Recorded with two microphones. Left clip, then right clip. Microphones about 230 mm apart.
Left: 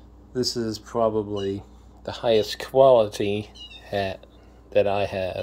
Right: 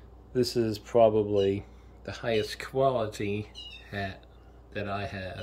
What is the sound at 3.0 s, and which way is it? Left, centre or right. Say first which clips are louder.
Speech: left 9 dB; left.